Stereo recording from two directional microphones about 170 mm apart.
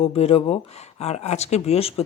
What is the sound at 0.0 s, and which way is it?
Speech, 35° left (ahead or behind).